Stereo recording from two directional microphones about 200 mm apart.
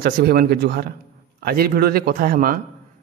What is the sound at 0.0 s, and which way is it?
A man's voice, 50° right (ahead or behind).